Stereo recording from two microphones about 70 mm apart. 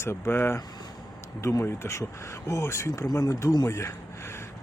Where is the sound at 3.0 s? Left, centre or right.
Left.